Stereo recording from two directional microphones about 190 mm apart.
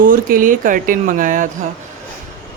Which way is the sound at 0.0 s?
45° right (ahead or behind).